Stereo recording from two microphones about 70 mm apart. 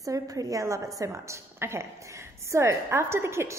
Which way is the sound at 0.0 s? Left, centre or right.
Right.